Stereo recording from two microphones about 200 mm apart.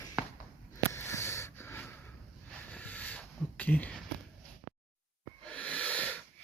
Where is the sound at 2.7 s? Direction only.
5° left (ahead or behind).